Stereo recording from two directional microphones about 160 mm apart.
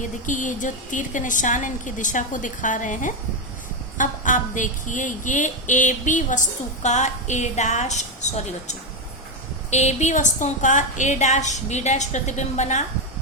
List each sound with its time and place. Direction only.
0.0 s a woman's voice: 55° left (ahead or behind)